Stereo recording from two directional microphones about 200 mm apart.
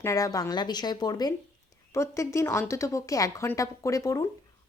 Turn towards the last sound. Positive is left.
turn(degrees=15)  # may be behind; listen again after turning